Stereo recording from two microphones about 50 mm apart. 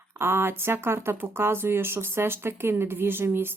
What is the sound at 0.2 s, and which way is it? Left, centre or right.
Speech, right.